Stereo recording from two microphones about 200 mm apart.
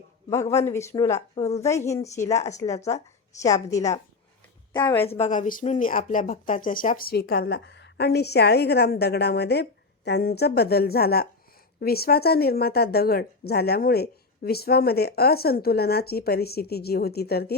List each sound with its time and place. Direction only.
0.5 s speech: 15° left (ahead or behind)
5.0 s speech: 30° left (ahead or behind); by 17.5 s 50° left (ahead or behind)